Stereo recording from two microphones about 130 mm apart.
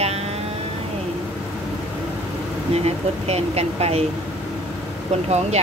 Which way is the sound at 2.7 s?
50° right (ahead or behind).